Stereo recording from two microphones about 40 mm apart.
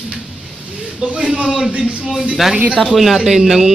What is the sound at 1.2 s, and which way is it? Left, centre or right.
Speech, right.